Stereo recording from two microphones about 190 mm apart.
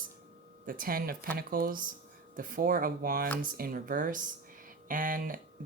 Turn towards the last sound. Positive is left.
turn(degrees=-45)  # may be behind; listen again after turning